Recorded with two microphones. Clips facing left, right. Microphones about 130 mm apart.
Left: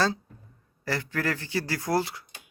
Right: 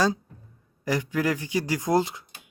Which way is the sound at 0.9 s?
15° right (ahead or behind).